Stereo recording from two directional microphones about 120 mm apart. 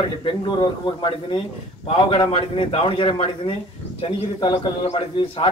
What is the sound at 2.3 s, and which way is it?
Speech, 50° left (ahead or behind).